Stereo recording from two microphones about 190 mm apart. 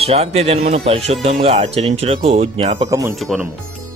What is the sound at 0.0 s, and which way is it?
Speech, 30° right (ahead or behind).